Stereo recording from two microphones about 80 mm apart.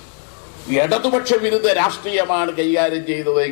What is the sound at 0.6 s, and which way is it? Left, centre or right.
A man's voice, centre.